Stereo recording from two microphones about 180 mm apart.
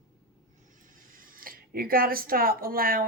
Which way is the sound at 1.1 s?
50° right (ahead or behind).